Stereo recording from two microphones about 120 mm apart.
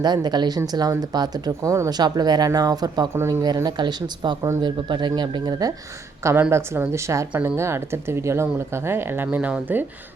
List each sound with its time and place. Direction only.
0.0 s speech: 35° right (ahead or behind)
6.5 s a woman's voice: 25° right (ahead or behind)